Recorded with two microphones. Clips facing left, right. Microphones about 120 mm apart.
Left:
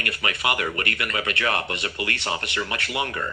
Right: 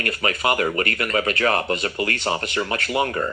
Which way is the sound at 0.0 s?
35° right (ahead or behind).